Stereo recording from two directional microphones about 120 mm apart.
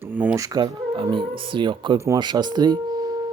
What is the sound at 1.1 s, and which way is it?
Speech, 45° right (ahead or behind).